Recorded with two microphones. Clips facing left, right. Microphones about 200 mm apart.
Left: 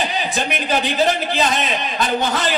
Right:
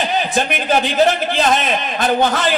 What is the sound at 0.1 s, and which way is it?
A man's voice, 50° right (ahead or behind).